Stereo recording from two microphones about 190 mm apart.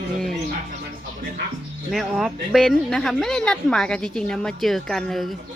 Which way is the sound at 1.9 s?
Centre (ahead or behind).